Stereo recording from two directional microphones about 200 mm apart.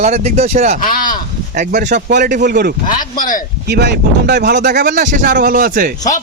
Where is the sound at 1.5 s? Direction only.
40° right (ahead or behind).